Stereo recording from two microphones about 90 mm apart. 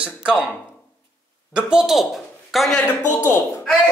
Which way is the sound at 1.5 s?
5° right (ahead or behind).